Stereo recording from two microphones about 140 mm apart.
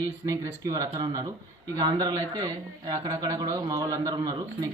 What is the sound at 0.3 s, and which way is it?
A man's voice, 25° right (ahead or behind).